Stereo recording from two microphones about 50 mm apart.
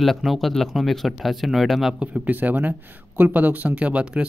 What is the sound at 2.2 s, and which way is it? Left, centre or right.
Speech, right.